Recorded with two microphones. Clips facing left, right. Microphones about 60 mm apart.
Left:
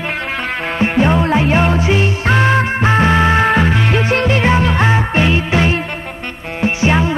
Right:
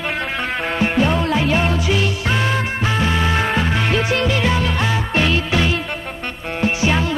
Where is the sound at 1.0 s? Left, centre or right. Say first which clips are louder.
Left 6 dB; left.